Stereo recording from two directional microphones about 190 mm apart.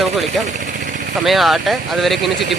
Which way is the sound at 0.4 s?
40° right (ahead or behind).